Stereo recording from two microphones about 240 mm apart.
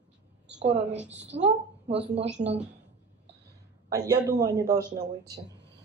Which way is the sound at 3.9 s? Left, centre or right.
Centre.